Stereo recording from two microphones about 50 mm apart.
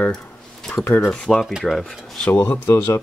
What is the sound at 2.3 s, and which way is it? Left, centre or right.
Speech, left.